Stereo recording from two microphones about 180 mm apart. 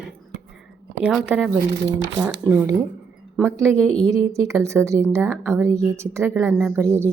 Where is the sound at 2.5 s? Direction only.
15° right (ahead or behind).